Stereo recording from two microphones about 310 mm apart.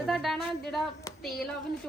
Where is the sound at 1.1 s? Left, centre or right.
Centre.